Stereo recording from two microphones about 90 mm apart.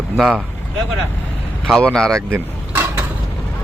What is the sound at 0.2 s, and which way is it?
Speech, 10° right (ahead or behind).